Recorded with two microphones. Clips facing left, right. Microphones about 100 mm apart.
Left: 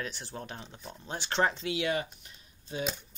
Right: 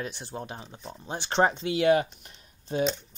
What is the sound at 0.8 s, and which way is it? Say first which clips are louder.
Speech: right 4 dB; 5° right (ahead or behind).